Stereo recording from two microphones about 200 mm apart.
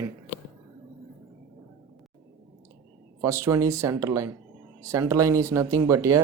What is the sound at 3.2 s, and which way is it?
Speech, 15° right (ahead or behind).